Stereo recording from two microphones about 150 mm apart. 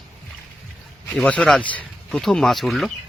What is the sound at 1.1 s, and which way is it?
Speech, 5° left (ahead or behind).